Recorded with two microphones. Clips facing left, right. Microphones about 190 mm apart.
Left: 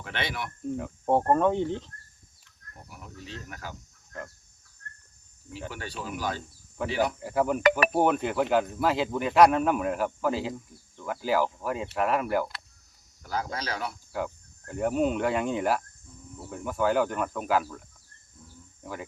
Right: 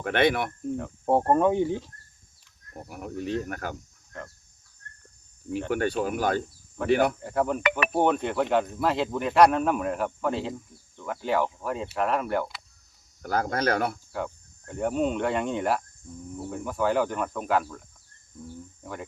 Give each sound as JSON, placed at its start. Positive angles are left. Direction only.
{"t": 0.0, "sound": "speech", "side_deg": -55}
{"t": 0.8, "sound": "speech", "side_deg": -5}
{"t": 2.7, "sound": "speech", "side_deg": -55}
{"t": 5.5, "sound": "speech", "side_deg": -55}
{"t": 7.2, "sound": "speech", "side_deg": 5}
{"t": 7.6, "sound": "speech", "side_deg": 40}
{"t": 7.9, "sound": "speech", "side_deg": 5}
{"t": 13.2, "sound": "speech", "side_deg": -55}
{"t": 14.1, "sound": "speech", "side_deg": 0}